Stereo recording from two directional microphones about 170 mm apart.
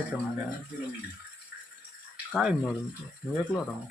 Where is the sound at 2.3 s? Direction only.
5° right (ahead or behind).